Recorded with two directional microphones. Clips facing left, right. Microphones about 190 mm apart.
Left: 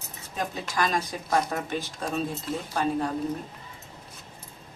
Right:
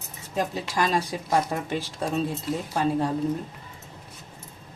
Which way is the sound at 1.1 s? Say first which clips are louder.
Right 3 dB; 20° right (ahead or behind).